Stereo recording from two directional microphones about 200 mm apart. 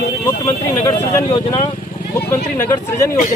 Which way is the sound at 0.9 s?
15° left (ahead or behind).